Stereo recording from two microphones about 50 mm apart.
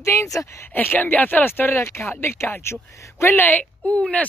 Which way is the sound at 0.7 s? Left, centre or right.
Left.